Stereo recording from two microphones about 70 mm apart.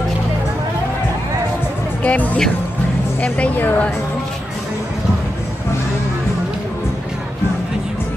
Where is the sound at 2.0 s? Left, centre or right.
Left.